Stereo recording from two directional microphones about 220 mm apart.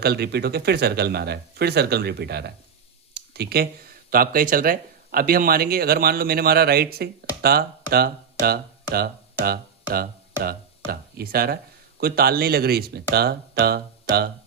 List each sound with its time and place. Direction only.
0.0 s speech: 45° right (ahead or behind)
3.2 s a sound: 45° right (ahead or behind)
4.1 s speech: 40° right (ahead or behind)